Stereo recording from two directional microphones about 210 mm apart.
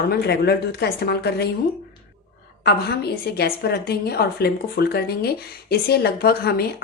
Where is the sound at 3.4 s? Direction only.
50° left (ahead or behind).